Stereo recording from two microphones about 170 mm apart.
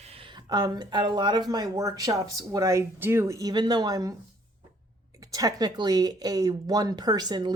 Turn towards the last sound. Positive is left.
turn(degrees=-25)  # may be behind; listen again after turning